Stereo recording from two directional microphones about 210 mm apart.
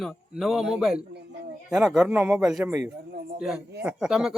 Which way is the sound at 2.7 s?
10° right (ahead or behind).